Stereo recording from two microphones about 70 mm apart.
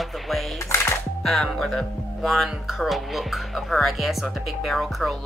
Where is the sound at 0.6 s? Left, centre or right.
Left.